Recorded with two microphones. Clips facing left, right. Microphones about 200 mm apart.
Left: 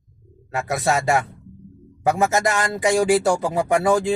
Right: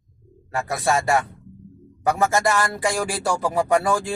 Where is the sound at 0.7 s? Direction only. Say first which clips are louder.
Left 1 dB; 20° left (ahead or behind).